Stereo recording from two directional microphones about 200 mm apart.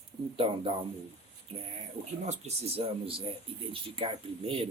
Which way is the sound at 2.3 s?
30° right (ahead or behind).